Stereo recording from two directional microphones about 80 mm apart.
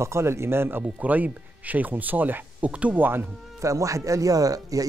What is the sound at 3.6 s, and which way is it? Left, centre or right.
Speech, right.